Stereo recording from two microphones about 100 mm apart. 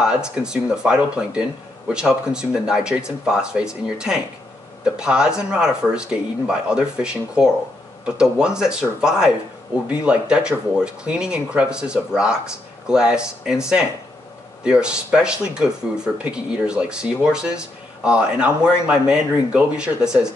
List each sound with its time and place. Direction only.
0.0 s speech: 10° right (ahead or behind)
14.6 s speech: 10° right (ahead or behind)